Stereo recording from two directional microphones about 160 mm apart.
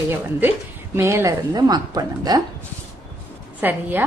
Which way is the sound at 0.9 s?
15° right (ahead or behind).